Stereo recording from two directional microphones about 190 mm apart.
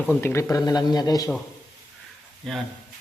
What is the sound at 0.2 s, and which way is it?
A man's voice, 10° left (ahead or behind).